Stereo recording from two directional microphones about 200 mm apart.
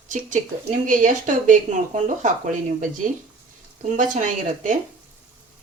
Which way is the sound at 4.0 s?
40° right (ahead or behind).